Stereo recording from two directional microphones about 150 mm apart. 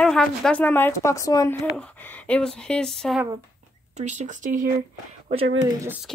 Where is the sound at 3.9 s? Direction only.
50° right (ahead or behind).